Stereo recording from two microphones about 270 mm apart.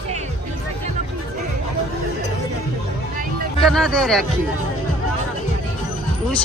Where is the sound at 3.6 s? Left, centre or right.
Centre.